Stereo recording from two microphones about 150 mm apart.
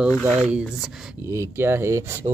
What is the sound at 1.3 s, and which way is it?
Speech, 15° right (ahead or behind).